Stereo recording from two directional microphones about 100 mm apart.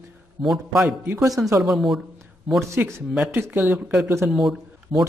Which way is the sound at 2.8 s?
30° right (ahead or behind).